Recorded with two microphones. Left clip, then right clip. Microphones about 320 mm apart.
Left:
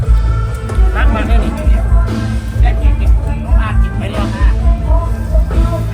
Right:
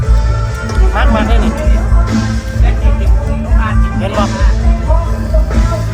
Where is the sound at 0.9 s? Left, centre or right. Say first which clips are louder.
Right 4 dB; centre.